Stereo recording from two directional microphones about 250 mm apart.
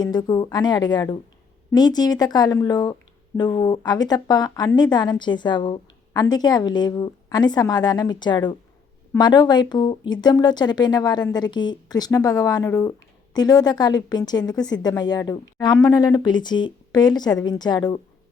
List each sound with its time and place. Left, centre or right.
0.0 s speech: centre